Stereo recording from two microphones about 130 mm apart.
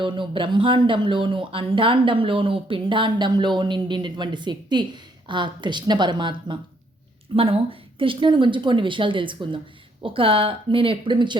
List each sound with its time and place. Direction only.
0.0 s speech: 40° right (ahead or behind)
7.3 s speech: 45° right (ahead or behind)